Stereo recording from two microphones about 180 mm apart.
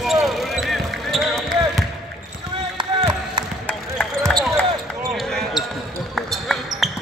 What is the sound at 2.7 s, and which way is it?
Chop, 25° right (ahead or behind).